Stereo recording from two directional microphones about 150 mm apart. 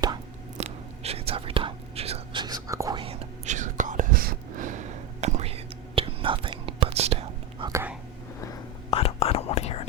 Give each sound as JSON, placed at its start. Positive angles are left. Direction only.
{"t": 0.6, "sound": "whispering", "side_deg": -40}
{"t": 2.4, "sound": "whispering", "side_deg": -25}
{"t": 3.0, "sound": "whispering", "side_deg": -40}
{"t": 7.6, "sound": "whispering", "side_deg": -20}
{"t": 8.9, "sound": "whispering", "side_deg": 40}